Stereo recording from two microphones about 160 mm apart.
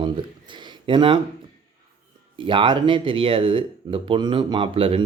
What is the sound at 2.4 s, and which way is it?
Speech, 30° right (ahead or behind).